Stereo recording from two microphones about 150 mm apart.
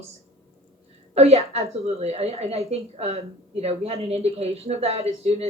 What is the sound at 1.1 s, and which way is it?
A woman's voice, 45° right (ahead or behind).